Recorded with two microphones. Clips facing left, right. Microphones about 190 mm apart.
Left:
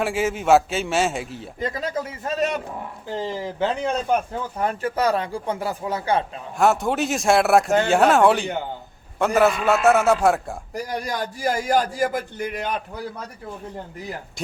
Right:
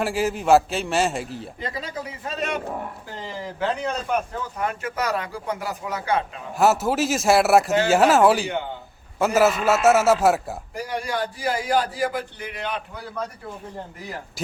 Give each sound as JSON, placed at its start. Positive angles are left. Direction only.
{"t": 0.0, "sound": "speech", "side_deg": 0}
{"t": 1.5, "sound": "a man's voice", "side_deg": 45}
{"t": 3.2, "sound": "speech", "side_deg": 30}
{"t": 6.6, "sound": "speech", "side_deg": -5}
{"t": 10.8, "sound": "a man's voice", "side_deg": 40}